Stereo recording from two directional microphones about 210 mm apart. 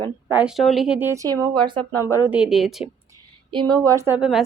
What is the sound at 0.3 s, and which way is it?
Speech, 5° right (ahead or behind).